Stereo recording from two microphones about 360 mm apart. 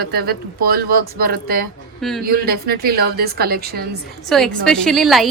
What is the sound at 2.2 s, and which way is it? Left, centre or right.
Speech, right.